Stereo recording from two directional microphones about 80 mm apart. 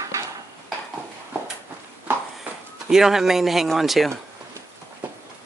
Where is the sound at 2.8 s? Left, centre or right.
Centre.